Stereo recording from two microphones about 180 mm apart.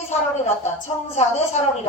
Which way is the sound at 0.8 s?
35° left (ahead or behind).